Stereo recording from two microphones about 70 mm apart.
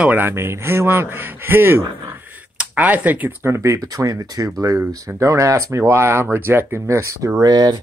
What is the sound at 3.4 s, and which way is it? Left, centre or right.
Speech, right.